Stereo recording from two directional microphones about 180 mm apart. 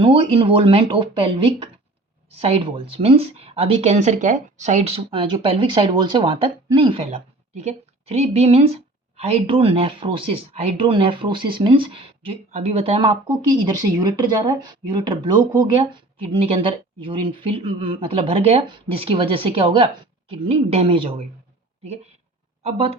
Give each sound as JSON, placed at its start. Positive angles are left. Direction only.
{"t": 0.0, "sound": "speech", "side_deg": -30}
{"t": 22.6, "sound": "speech", "side_deg": -35}